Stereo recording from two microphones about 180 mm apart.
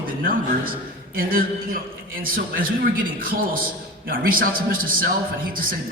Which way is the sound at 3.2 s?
50° right (ahead or behind).